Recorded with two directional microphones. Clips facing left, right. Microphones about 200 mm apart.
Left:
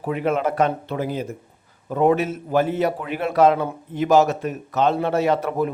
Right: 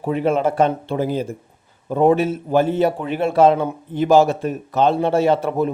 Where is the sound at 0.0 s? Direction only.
30° right (ahead or behind).